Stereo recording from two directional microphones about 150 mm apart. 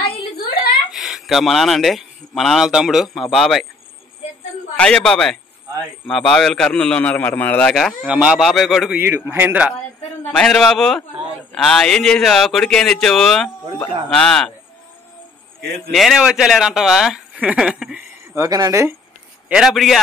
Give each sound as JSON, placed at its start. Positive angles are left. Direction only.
{"t": 0.9, "sound": "speech", "side_deg": 0}
{"t": 4.7, "sound": "a man's voice", "side_deg": 5}
{"t": 9.0, "sound": "a man's voice", "side_deg": -15}
{"t": 10.3, "sound": "speech", "side_deg": 5}
{"t": 15.9, "sound": "speech", "side_deg": 0}
{"t": 18.3, "sound": "speech", "side_deg": -20}
{"t": 19.5, "sound": "speech", "side_deg": 0}